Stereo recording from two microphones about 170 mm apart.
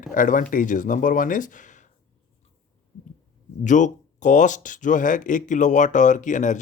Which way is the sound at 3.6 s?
45° left (ahead or behind).